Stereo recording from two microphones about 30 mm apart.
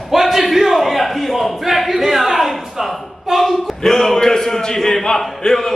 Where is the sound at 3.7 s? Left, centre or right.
Centre.